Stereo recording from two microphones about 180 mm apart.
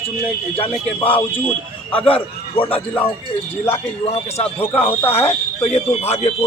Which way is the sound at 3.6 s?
35° left (ahead or behind).